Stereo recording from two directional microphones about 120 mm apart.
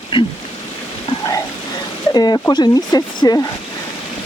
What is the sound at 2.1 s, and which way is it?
Speech, 35° left (ahead or behind).